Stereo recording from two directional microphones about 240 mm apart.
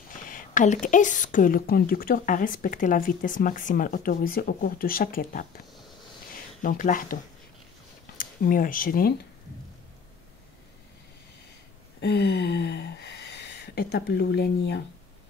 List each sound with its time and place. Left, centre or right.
0.2 s a woman's voice: left
6.6 s a woman's voice: left
8.2 s speech: left
12.0 s speech: left